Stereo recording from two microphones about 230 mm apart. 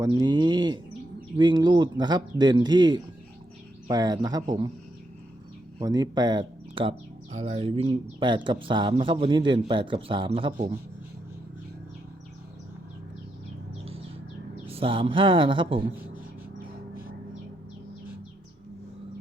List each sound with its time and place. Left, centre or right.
0.0 s a man's voice: centre
5.8 s a man's voice: centre
14.7 s a man's voice: right